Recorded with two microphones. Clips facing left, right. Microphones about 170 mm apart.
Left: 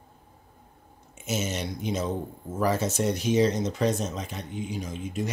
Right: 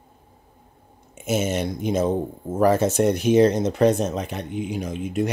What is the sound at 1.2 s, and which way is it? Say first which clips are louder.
Speech: right 7 dB; 55° right (ahead or behind).